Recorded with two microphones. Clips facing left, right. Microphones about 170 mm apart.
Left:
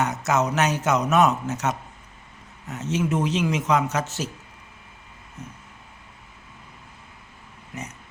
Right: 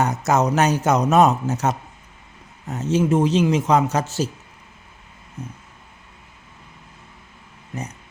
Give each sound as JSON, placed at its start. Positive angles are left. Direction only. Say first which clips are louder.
{"t": 0.3, "sound": "a man's voice", "louder": "right 4 dB", "side_deg": -35}